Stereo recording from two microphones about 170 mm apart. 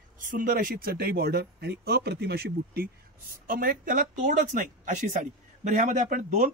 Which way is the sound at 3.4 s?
55° right (ahead or behind).